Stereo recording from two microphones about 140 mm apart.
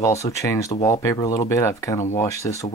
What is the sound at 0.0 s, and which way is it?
Speech, 20° left (ahead or behind).